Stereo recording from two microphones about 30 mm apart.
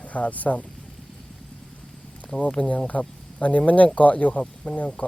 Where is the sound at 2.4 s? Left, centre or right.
Left.